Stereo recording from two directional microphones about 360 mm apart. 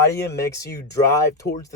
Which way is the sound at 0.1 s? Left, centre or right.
Centre.